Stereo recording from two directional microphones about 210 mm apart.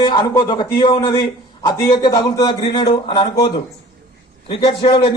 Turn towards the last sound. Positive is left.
turn(degrees=25)  # may be behind; listen again after turning